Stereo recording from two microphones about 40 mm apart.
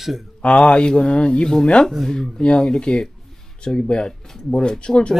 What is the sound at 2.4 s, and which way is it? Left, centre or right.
Speech, left.